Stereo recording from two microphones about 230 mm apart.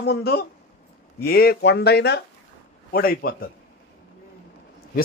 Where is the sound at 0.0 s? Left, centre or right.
Left.